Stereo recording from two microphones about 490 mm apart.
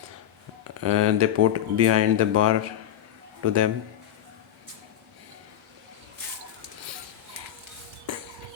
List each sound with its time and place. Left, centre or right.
0.8 s speech: right